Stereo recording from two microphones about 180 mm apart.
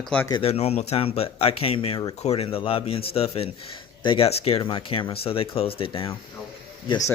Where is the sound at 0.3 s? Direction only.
30° left (ahead or behind).